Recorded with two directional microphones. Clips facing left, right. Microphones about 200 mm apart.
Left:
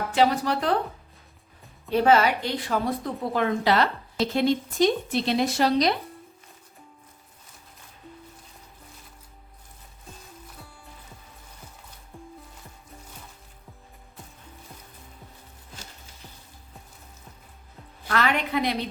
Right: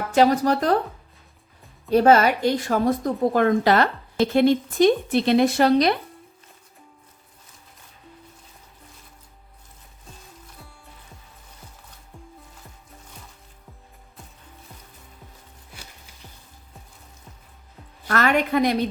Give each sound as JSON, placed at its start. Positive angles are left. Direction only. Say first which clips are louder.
{"t": 0.1, "sound": "a woman's voice", "louder": "right 5 dB", "side_deg": -45}
{"t": 1.9, "sound": "a woman's voice", "louder": "right 4 dB", "side_deg": -45}
{"t": 18.1, "sound": "a woman's voice", "louder": "right 4 dB", "side_deg": -45}